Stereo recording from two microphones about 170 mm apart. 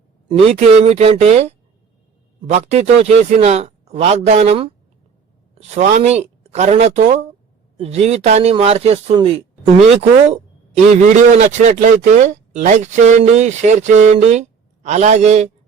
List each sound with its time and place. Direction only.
0.3 s a man's voice: 40° right (ahead or behind)